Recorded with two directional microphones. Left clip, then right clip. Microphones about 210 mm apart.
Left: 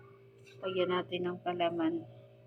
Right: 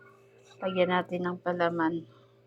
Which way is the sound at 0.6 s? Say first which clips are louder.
Right 6 dB; 20° right (ahead or behind).